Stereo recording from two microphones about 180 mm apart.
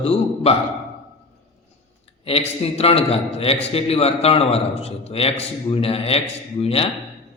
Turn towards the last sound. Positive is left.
turn(degrees=30)  # may be behind; listen again after turning